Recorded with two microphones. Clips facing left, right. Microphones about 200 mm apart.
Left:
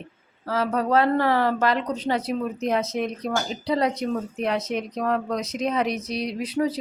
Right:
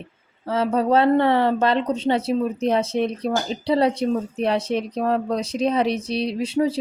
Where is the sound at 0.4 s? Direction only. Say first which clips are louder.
Right 4 dB; 25° right (ahead or behind).